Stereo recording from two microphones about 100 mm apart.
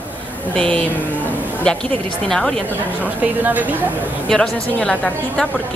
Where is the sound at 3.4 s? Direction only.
15° right (ahead or behind).